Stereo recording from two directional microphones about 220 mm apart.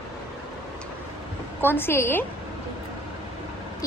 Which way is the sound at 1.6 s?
10° left (ahead or behind).